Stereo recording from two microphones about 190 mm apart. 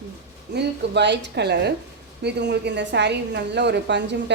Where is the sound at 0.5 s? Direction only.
65° right (ahead or behind).